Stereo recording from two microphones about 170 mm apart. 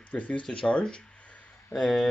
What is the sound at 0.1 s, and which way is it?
Speech, 10° left (ahead or behind).